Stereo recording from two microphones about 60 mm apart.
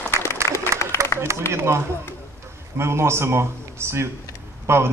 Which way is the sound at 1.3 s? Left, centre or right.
Right.